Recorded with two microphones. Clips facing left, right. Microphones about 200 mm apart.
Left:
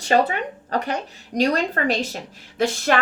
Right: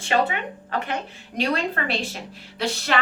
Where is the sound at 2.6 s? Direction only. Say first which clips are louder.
Left 4 dB; 45° left (ahead or behind).